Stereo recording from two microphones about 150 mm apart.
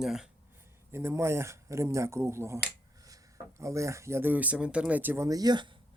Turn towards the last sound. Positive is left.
turn(degrees=-30)  # may be behind; listen again after turning